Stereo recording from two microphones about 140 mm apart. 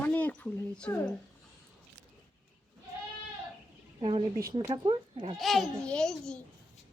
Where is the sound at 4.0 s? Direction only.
35° right (ahead or behind).